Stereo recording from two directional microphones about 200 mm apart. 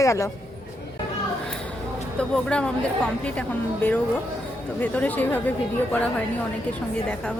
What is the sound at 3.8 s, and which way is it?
Speech, 10° left (ahead or behind).